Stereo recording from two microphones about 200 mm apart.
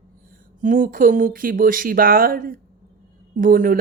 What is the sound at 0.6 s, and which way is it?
Speech, 40° right (ahead or behind).